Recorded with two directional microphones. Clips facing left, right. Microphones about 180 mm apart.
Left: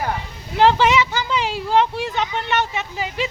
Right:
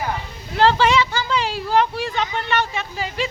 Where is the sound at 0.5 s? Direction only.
15° left (ahead or behind).